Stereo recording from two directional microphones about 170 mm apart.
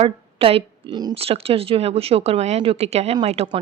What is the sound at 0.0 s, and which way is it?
Speech, 35° right (ahead or behind).